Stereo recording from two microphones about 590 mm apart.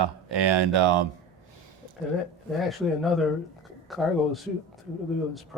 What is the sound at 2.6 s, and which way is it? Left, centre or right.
Speech, centre.